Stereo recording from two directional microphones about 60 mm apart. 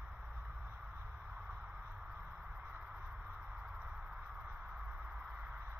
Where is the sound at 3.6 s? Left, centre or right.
Centre.